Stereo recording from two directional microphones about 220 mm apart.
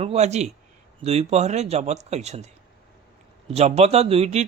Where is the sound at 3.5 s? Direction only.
30° right (ahead or behind).